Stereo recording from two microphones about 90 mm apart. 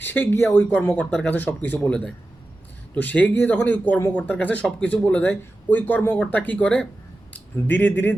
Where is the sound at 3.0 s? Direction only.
20° left (ahead or behind).